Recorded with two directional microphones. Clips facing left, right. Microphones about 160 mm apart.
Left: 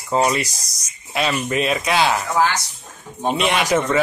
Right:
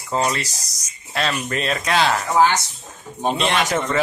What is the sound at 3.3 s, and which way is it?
Speech, 5° left (ahead or behind).